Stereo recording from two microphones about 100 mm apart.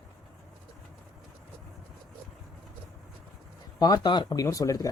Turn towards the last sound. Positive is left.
turn(degrees=35)  # may be behind; listen again after turning